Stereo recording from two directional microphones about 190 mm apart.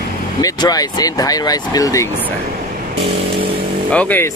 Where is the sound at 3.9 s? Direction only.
10° left (ahead or behind).